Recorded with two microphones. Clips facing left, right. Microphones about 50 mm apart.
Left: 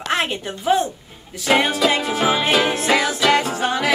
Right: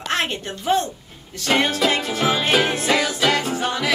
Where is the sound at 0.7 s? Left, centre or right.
Centre.